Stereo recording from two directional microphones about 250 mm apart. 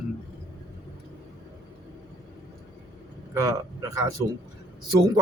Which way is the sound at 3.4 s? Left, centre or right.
Centre.